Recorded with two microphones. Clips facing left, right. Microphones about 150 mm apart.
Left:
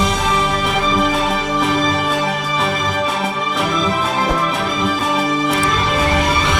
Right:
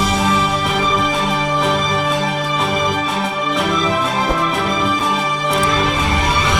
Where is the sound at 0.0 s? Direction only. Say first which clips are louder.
Right 1 dB; centre (ahead or behind).